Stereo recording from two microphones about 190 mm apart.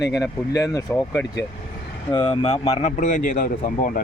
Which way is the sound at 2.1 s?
25° left (ahead or behind).